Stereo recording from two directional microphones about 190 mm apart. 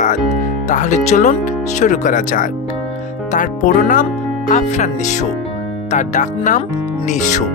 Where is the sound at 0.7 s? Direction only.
40° left (ahead or behind).